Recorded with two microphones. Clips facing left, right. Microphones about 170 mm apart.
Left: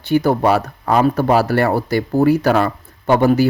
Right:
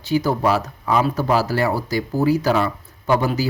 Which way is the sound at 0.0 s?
60° left (ahead or behind).